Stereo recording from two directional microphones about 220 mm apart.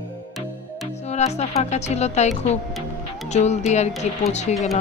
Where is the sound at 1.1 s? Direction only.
30° left (ahead or behind).